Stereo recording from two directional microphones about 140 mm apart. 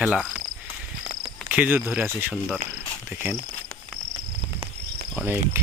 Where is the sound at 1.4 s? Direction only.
10° right (ahead or behind).